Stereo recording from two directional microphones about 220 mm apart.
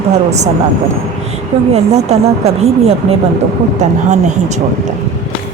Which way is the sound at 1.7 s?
30° right (ahead or behind).